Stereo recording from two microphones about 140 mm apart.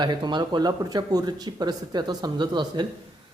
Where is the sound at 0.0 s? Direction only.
35° right (ahead or behind).